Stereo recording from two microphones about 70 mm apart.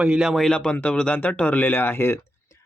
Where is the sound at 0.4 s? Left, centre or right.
Centre.